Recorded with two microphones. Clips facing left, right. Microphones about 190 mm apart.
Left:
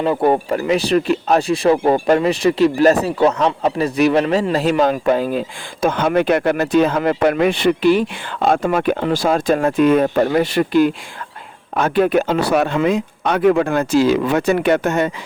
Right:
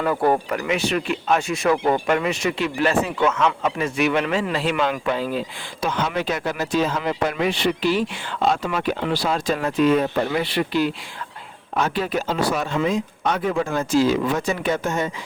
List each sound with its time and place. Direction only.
0.0 s speech: 25° left (ahead or behind); by 15.1 s 65° left (ahead or behind)